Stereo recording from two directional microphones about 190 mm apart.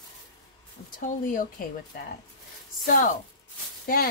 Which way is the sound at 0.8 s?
45° left (ahead or behind).